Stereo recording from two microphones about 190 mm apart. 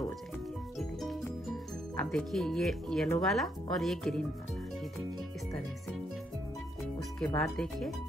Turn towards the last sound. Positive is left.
turn(degrees=0)  # may be behind; listen again after turning